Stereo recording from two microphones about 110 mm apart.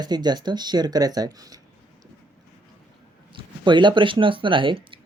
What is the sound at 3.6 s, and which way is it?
Speech, 45° right (ahead or behind).